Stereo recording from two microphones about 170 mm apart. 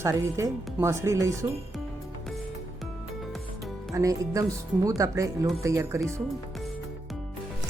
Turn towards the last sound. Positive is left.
turn(degrees=-15)  # may be behind; listen again after turning